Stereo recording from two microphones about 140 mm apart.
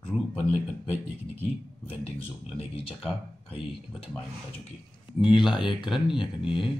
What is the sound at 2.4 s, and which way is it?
Speech, 40° left (ahead or behind).